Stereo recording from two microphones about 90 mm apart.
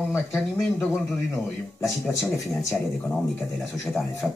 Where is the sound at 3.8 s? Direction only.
Centre (ahead or behind).